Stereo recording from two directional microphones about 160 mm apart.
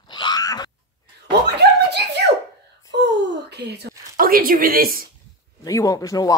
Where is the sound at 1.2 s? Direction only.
90° right.